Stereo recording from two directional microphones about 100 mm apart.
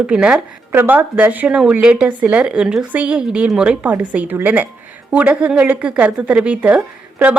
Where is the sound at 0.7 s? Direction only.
20° right (ahead or behind).